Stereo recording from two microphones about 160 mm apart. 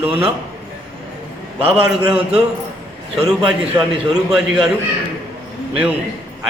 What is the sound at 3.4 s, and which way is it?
A man's voice, 5° right (ahead or behind).